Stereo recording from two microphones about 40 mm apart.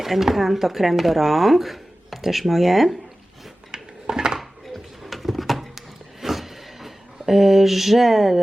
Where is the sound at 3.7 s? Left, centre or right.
Centre.